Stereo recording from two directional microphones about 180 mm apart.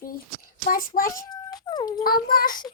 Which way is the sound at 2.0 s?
55° left (ahead or behind).